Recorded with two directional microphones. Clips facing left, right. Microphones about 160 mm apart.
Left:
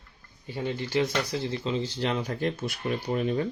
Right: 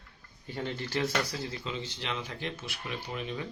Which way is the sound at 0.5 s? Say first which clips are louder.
Left 6 dB; 15° left (ahead or behind).